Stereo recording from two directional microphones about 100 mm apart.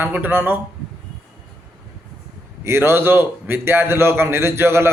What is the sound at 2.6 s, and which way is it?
A man's voice, 25° right (ahead or behind).